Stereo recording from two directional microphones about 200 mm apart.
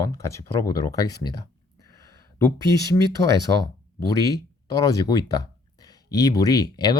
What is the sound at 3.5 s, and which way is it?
Speech, 20° left (ahead or behind).